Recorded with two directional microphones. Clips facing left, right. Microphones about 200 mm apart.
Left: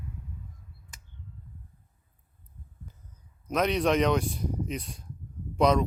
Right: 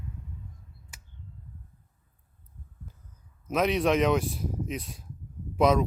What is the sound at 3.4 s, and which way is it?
Speech, 5° right (ahead or behind).